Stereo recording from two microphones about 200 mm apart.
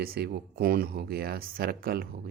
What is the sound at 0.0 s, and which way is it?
Speech, 50° right (ahead or behind).